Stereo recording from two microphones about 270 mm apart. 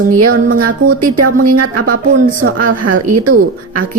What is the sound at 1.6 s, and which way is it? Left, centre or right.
Speech, right.